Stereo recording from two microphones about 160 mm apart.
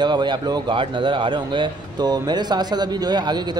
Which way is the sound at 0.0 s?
30° right (ahead or behind).